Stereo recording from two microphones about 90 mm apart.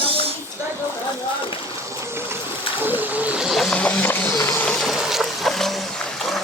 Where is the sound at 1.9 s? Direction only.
30° right (ahead or behind).